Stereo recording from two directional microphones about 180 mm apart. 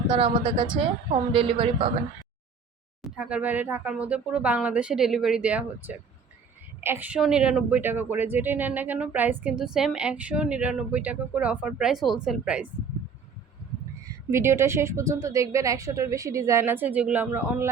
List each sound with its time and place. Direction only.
0.1 s a woman's voice: 30° right (ahead or behind)
3.2 s speech: 5° right (ahead or behind)
14.3 s speech: 15° right (ahead or behind)